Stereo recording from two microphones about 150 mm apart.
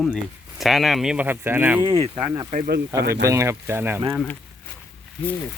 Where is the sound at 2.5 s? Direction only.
75° right (ahead or behind).